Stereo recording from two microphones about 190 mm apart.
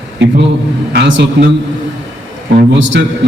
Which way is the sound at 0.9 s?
65° right (ahead or behind).